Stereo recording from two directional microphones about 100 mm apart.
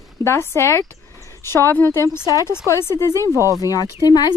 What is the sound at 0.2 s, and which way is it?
A woman's voice, 25° left (ahead or behind).